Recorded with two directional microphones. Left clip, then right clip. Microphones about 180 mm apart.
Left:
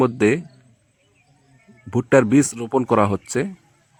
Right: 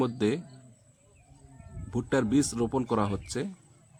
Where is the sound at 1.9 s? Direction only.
35° left (ahead or behind).